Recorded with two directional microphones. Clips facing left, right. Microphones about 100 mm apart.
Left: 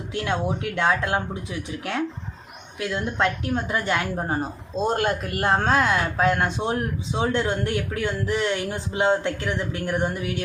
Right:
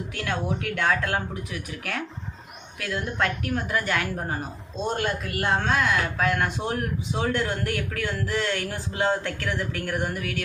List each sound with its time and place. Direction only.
0.2 s speech: 25° left (ahead or behind)